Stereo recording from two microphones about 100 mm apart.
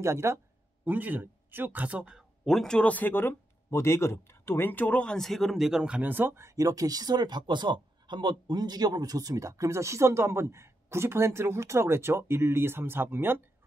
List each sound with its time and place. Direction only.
0.0 s speech: 30° right (ahead or behind)
0.8 s speech: 20° right (ahead or behind)
2.4 s speech: 5° left (ahead or behind); by 13.4 s 20° right (ahead or behind)